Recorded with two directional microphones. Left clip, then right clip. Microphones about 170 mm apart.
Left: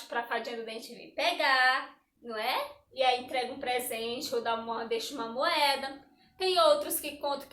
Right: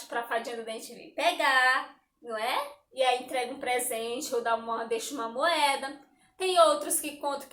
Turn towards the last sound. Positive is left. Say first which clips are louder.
# right 1 dB
turn(degrees=-20)  # may be behind; listen again after turning